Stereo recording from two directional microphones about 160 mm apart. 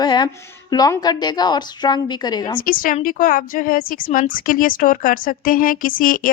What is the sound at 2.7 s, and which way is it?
A woman's voice, 60° left (ahead or behind).